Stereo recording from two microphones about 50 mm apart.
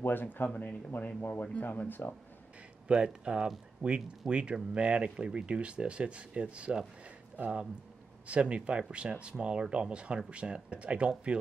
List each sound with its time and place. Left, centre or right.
0.0 s speech: left
0.5 s speech: left
2.9 s speech: right
8.3 s speech: right